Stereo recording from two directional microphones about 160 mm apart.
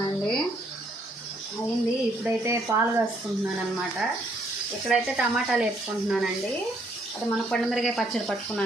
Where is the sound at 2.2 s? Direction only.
15° right (ahead or behind).